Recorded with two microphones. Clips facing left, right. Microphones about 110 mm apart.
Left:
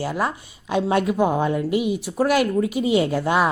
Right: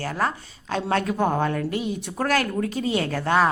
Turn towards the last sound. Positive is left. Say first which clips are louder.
# left 2 dB
turn(degrees=15)  # may be behind; listen again after turning